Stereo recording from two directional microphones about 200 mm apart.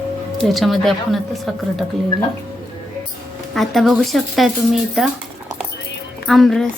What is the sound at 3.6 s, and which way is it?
A woman's voice, centre (ahead or behind).